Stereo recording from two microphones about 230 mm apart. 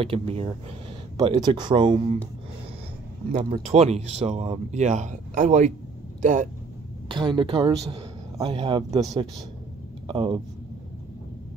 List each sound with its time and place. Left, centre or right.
0.0 s speech: right
3.3 s speech: right
7.1 s speech: right
10.0 s speech: right